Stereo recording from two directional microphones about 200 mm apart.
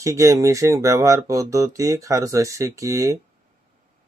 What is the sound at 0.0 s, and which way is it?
Speech, 15° right (ahead or behind).